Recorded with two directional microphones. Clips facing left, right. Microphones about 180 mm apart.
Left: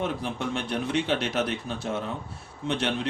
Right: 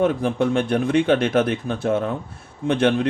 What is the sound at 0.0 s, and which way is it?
Speech, 50° right (ahead or behind).